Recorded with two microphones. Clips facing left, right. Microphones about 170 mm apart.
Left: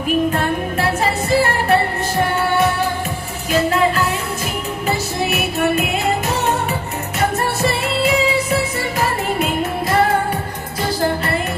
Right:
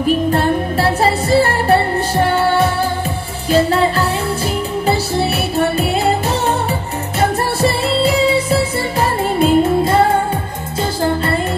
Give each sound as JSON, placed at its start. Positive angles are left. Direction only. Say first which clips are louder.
{"t": 0.0, "sound": "music", "louder": "right 3 dB", "side_deg": -35}